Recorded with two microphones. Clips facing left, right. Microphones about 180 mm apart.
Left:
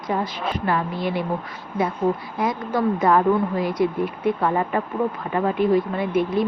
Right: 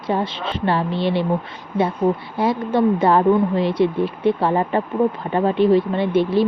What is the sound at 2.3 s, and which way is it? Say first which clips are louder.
Speech: right 4 dB; 30° right (ahead or behind).